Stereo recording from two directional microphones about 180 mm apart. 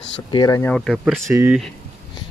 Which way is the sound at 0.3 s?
20° left (ahead or behind).